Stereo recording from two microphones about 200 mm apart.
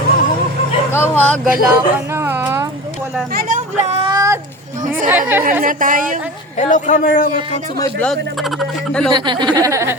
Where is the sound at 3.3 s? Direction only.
45° right (ahead or behind).